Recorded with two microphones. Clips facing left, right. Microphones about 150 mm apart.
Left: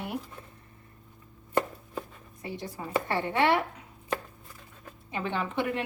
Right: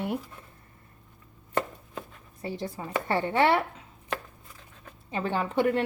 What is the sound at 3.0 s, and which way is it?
Speech, 30° right (ahead or behind).